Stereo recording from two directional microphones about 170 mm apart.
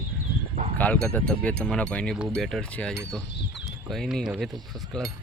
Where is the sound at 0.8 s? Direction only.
10° left (ahead or behind).